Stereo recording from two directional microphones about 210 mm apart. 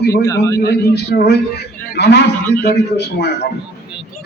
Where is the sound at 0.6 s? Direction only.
50° left (ahead or behind).